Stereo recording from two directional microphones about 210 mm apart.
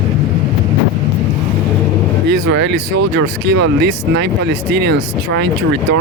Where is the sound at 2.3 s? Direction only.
55° right (ahead or behind).